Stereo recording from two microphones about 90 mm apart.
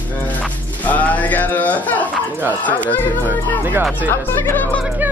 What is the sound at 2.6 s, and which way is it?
Speech, 20° left (ahead or behind).